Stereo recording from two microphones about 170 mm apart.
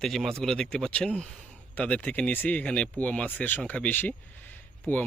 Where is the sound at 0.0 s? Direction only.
Centre (ahead or behind).